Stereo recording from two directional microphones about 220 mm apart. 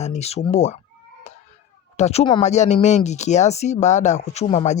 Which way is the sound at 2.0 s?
30° left (ahead or behind).